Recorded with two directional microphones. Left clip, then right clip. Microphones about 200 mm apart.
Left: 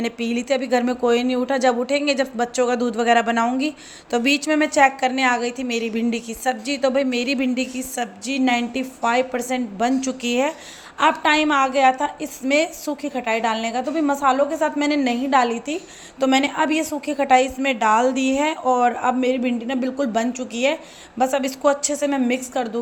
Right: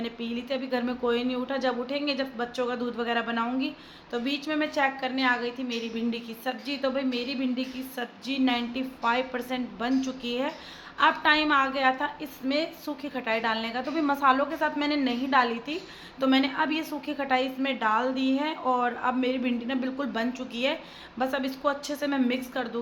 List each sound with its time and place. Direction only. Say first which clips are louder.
0.0 s a woman's voice: left 9 dB; 35° left (ahead or behind)